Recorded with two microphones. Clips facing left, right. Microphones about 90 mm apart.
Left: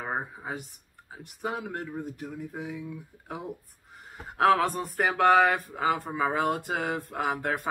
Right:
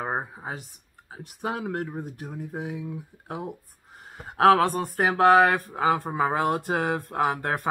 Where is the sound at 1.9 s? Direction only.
25° right (ahead or behind).